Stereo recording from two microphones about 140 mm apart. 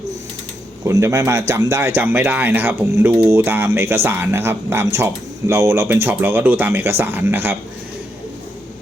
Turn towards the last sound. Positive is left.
turn(degrees=-15)  # may be behind; listen again after turning